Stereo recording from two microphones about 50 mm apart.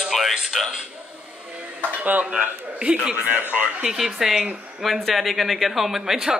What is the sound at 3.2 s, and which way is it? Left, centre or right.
Speech, right.